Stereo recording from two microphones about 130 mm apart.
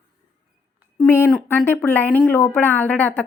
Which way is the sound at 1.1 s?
15° left (ahead or behind).